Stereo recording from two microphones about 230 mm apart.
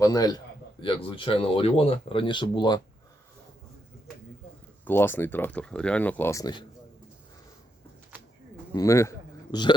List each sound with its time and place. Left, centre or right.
0.0 s speech: centre
4.9 s speech: centre
8.7 s a man's voice: centre